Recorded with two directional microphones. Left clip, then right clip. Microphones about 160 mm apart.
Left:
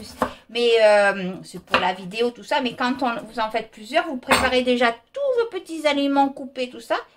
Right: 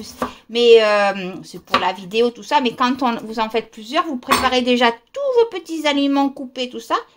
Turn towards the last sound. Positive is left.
turn(degrees=-45)  # may be behind; listen again after turning